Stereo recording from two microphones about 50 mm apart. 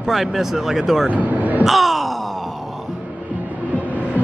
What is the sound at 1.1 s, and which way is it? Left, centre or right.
Vehicle, right.